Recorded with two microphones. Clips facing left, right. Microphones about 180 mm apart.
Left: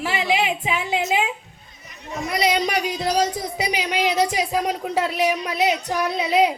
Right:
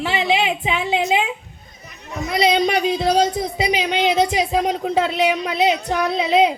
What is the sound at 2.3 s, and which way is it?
Speech, 25° right (ahead or behind).